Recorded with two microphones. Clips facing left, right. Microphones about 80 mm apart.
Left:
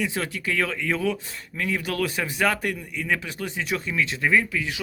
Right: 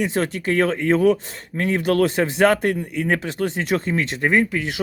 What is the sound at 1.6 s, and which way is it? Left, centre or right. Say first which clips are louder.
Speech: right 8 dB; right.